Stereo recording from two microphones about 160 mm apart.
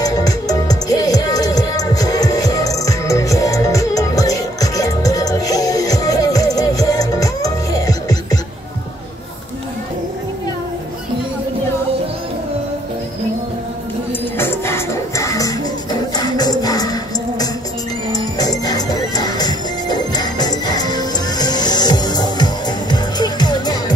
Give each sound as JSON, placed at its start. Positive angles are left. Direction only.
{"t": 0.0, "sound": "music", "side_deg": 25}
{"t": 14.4, "sound": "music", "side_deg": 15}